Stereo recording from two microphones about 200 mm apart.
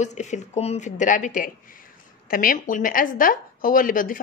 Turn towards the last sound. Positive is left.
turn(degrees=45)  # may be behind; listen again after turning